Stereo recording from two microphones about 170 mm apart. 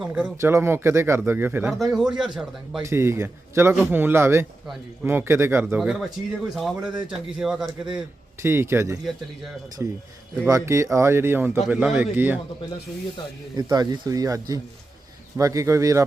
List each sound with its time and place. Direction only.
0.0 s speech: 5° right (ahead or behind)
2.8 s speech: 15° right (ahead or behind)
8.4 s speech: 15° right (ahead or behind)
13.6 s speech: 25° right (ahead or behind)